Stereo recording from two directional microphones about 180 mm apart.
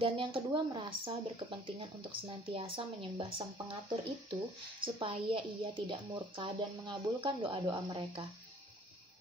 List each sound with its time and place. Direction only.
0.0 s speech: 30° right (ahead or behind)